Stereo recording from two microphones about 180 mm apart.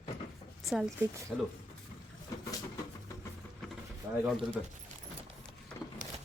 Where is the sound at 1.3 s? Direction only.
Centre (ahead or behind).